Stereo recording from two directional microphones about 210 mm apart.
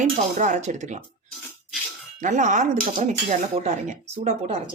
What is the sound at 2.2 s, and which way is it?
Speech, 35° right (ahead or behind).